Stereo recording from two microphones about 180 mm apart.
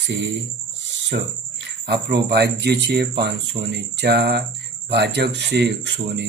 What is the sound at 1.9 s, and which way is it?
Speech, 65° right (ahead or behind).